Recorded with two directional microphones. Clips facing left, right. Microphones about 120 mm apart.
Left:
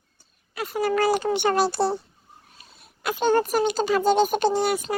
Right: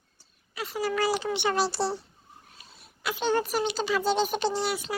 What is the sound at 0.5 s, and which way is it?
Speech, 50° left (ahead or behind).